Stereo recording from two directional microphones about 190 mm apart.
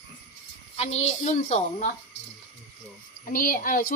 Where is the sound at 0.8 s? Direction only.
35° left (ahead or behind).